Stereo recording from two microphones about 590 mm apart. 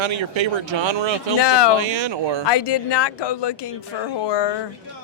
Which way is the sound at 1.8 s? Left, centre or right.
Right.